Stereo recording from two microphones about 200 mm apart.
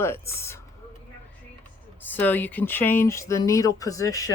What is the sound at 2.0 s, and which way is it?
A woman's voice, 10° left (ahead or behind).